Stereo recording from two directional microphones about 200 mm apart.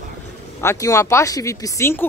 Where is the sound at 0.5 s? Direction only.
15° left (ahead or behind).